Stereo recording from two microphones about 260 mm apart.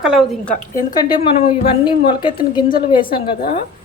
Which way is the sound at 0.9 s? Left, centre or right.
Centre.